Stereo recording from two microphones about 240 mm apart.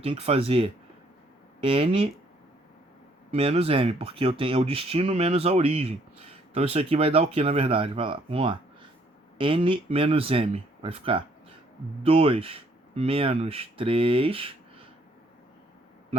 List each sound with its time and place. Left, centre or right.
0.0 s speech: right
3.3 s speech: right